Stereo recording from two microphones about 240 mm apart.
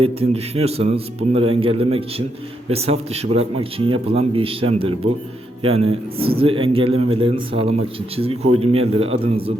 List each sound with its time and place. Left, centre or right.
0.0 s a man's voice: right